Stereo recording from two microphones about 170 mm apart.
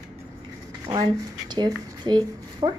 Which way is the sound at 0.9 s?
25° right (ahead or behind).